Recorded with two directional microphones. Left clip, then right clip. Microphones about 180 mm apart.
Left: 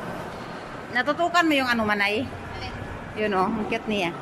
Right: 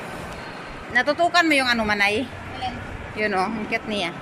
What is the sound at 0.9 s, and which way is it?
A woman's voice, centre (ahead or behind).